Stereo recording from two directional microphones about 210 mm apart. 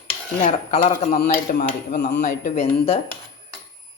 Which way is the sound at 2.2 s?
35° left (ahead or behind).